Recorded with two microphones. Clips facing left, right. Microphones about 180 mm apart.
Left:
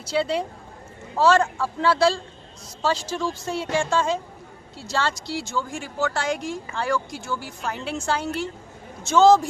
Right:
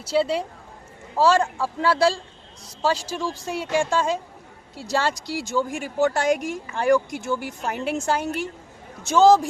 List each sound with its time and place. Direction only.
0.0 s speech: 5° right (ahead or behind)
6.2 s speech: 45° right (ahead or behind)
6.7 s speech: 20° right (ahead or behind)
7.9 s speech: 45° right (ahead or behind)
8.2 s speech: 15° right (ahead or behind)